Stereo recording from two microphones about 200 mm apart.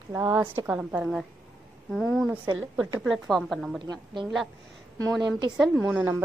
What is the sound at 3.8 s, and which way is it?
A woman's voice, 25° right (ahead or behind).